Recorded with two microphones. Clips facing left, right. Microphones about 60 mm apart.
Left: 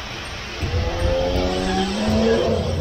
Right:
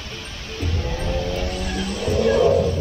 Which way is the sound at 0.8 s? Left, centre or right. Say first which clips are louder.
Left 6 dB; left.